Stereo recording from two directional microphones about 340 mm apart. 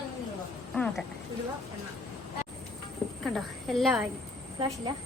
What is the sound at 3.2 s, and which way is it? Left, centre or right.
Speech, centre.